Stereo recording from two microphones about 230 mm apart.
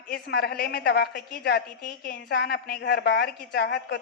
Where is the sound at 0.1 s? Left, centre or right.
Left.